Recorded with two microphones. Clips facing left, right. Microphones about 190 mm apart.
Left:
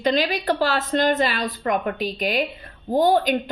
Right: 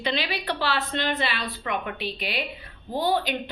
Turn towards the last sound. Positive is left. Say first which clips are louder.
# left 6 dB
turn(degrees=45)  # may be behind; listen again after turning